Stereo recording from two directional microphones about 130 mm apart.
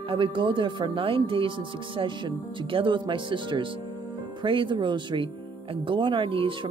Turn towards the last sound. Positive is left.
turn(degrees=-40)  # may be behind; listen again after turning